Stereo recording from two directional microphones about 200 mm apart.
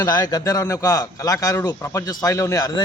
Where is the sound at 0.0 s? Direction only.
20° left (ahead or behind).